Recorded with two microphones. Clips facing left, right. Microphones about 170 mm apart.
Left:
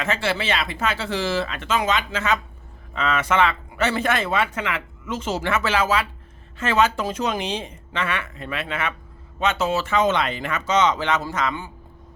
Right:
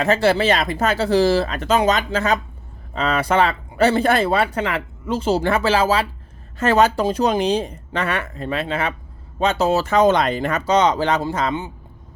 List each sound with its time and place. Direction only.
0.0 s speech: 40° right (ahead or behind)